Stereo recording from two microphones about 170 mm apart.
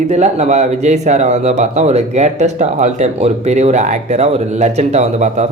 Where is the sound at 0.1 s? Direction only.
40° right (ahead or behind).